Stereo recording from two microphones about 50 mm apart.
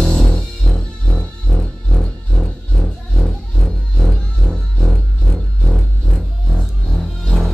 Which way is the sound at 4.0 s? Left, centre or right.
Centre.